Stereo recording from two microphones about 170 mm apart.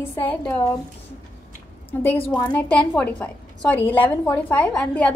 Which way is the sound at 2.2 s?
20° left (ahead or behind).